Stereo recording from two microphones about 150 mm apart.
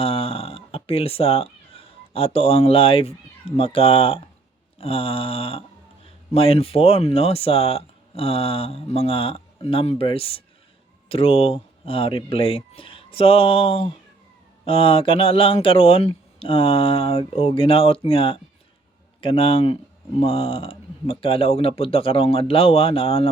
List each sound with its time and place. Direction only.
0.0 s music: 40° left (ahead or behind)
3.6 s speech: 40° left (ahead or behind)